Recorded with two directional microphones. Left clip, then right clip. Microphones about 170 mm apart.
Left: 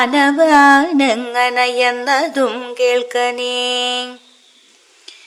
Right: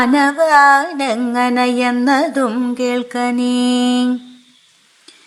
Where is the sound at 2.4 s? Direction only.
35° left (ahead or behind).